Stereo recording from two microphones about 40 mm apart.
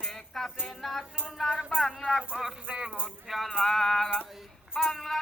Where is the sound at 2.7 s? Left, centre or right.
Right.